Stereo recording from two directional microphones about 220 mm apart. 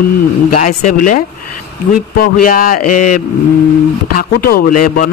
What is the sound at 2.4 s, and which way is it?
Speech, 40° left (ahead or behind).